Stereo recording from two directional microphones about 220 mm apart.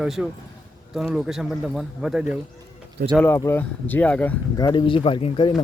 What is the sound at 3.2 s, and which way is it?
Speech, 10° left (ahead or behind).